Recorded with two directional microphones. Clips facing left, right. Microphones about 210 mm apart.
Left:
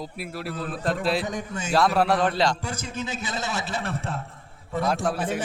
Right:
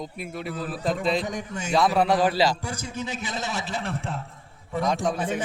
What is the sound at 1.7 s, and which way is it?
A man's voice, centre (ahead or behind).